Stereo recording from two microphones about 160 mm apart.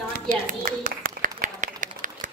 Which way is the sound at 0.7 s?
55° right (ahead or behind).